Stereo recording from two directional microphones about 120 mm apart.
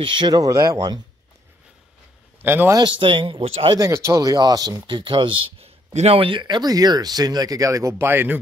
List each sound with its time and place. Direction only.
0.0 s speech: 40° right (ahead or behind)
2.4 s speech: 20° right (ahead or behind)
2.8 s speech: 45° right (ahead or behind)
3.3 s speech: 60° right (ahead or behind)
3.7 s speech: 25° right (ahead or behind)